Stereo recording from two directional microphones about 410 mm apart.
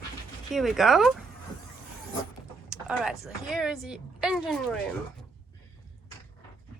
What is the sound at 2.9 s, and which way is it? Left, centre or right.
Speech, centre.